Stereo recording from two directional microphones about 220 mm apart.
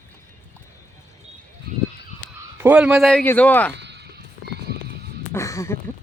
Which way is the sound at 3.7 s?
50° right (ahead or behind).